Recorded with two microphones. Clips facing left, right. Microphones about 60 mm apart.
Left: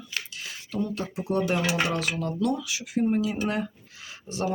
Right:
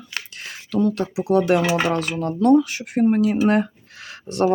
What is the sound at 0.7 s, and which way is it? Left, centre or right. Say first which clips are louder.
Speech: right 9 dB; right.